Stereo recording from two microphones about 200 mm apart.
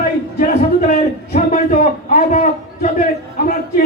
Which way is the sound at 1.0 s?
40° left (ahead or behind).